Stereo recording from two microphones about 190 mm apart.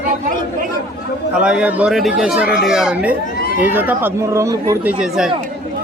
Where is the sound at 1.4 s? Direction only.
5° right (ahead or behind).